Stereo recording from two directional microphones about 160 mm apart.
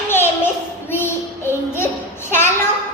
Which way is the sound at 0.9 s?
15° left (ahead or behind).